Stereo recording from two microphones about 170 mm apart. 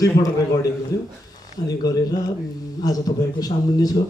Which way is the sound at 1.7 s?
20° left (ahead or behind).